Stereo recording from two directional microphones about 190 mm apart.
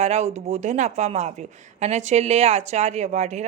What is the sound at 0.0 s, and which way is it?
Speech, 35° right (ahead or behind).